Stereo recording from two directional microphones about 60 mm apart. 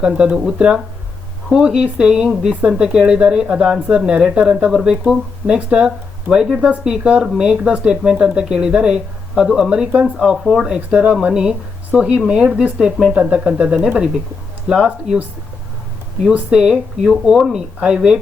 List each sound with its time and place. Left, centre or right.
0.0 s speech: centre
10.8 s speech: centre
16.2 s speech: centre